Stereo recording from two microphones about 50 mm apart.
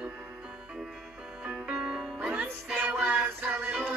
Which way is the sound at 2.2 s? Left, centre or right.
Right.